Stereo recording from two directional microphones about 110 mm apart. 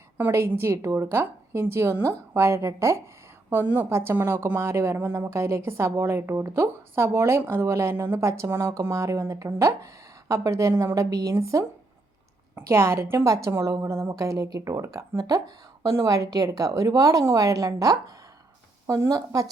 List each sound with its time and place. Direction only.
0.2 s a woman's voice: 20° right (ahead or behind)